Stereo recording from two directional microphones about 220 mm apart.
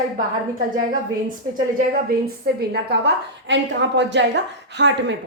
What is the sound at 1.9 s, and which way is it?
A woman's voice, 45° right (ahead or behind).